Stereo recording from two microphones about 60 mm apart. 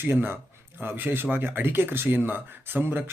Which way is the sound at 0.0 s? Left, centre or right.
Right.